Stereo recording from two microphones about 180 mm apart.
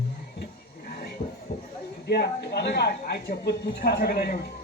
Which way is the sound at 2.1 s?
65° left (ahead or behind).